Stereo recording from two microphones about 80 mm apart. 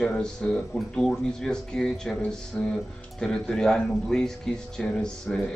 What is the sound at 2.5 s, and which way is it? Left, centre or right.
Speech, centre.